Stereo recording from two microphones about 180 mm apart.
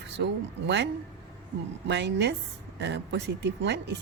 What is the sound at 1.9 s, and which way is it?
Speech, 75° right (ahead or behind).